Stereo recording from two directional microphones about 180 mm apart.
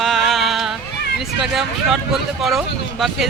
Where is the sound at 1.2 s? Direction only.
Centre (ahead or behind).